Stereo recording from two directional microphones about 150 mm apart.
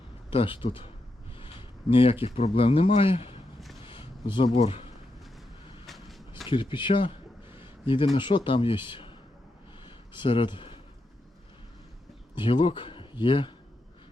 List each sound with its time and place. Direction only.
0.3 s a man's voice: 35° left (ahead or behind)
1.9 s a man's voice: 35° left (ahead or behind)
5.8 s vehicle: centre (ahead or behind)
6.5 s a man's voice: 35° left (ahead or behind)
10.2 s speech: 35° left (ahead or behind)
12.3 s speech: 30° left (ahead or behind)